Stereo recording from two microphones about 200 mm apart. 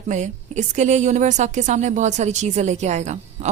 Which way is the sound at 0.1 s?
35° right (ahead or behind).